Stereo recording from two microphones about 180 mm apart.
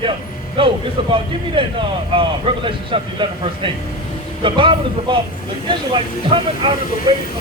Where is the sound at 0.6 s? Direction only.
30° right (ahead or behind).